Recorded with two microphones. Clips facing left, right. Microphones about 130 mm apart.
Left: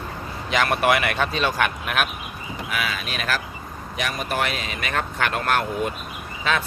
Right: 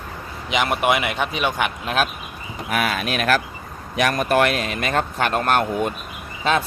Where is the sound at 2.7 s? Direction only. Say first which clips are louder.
Right 7 dB; 50° right (ahead or behind).